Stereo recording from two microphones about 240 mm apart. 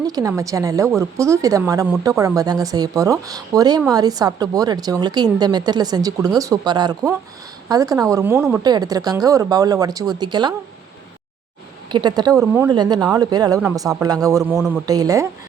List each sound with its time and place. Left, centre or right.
0.0 s a woman's voice: centre
11.9 s a woman's voice: centre
12.4 s a woman's voice: centre
12.7 s a woman's voice: centre